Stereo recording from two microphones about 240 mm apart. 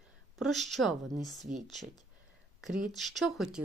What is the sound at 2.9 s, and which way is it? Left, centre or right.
Speech, centre.